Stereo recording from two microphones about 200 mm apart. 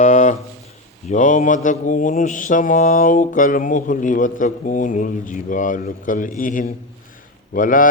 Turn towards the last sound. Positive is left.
turn(degrees=40)  # may be behind; listen again after turning